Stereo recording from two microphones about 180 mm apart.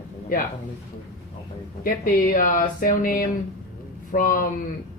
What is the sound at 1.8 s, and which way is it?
Speech, 50° left (ahead or behind).